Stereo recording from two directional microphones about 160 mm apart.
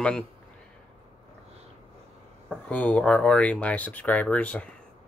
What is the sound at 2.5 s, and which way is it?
Speech, 10° left (ahead or behind).